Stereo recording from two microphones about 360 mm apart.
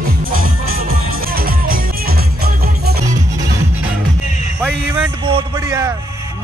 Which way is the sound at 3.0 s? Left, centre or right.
Centre.